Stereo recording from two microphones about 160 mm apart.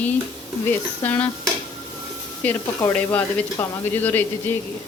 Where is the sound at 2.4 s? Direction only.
15° left (ahead or behind).